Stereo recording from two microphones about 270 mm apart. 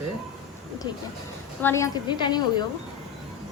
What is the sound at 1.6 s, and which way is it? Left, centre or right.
A woman's voice, centre.